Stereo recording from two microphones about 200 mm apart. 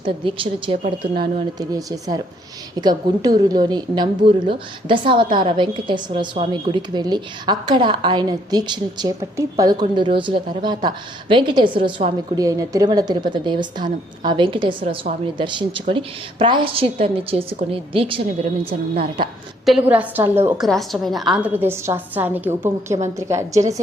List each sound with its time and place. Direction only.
0.0 s a woman's voice: 25° right (ahead or behind)
19.6 s a woman's voice: 5° right (ahead or behind)
20.7 s a woman's voice: centre (ahead or behind)